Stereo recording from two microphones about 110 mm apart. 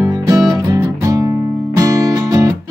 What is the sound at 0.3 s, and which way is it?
Music, 5° right (ahead or behind).